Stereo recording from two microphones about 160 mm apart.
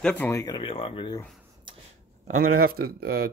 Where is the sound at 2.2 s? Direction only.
60° right (ahead or behind).